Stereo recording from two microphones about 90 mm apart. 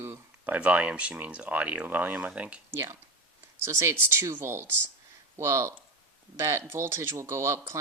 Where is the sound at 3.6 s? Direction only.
35° right (ahead or behind).